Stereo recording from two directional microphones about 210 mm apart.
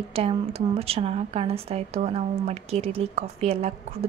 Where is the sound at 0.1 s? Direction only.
30° right (ahead or behind).